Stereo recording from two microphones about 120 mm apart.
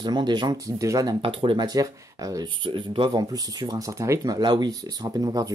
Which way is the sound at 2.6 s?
45° right (ahead or behind).